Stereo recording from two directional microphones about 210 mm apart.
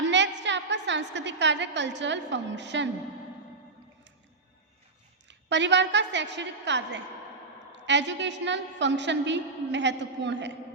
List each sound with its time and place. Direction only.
0.0 s a woman's voice: 60° right (ahead or behind)
5.3 s a woman's voice: 55° right (ahead or behind)